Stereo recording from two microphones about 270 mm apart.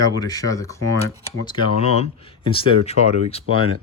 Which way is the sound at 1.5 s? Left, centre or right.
Left.